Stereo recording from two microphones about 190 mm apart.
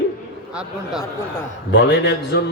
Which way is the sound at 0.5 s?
Centre (ahead or behind).